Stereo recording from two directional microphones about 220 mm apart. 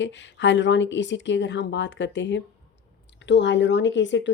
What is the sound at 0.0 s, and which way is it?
A woman's voice, 55° left (ahead or behind).